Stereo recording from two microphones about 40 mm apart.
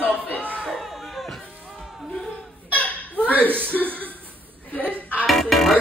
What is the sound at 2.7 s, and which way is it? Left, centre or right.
Hiccup, left.